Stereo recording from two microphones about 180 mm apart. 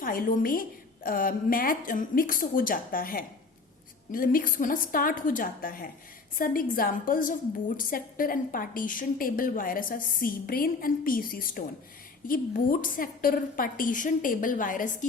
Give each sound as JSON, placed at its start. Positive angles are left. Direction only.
{"t": 0.0, "sound": "a woman's voice", "side_deg": 50}